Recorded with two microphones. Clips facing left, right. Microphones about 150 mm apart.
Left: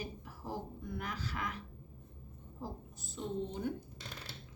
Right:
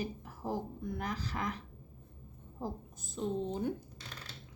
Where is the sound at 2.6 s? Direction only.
45° right (ahead or behind).